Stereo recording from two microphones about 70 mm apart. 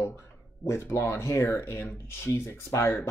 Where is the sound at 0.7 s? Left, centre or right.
Left.